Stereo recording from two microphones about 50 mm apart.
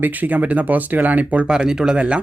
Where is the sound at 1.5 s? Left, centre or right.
Centre.